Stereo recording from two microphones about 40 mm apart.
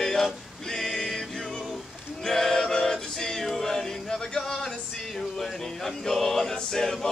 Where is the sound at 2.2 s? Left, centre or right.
Centre.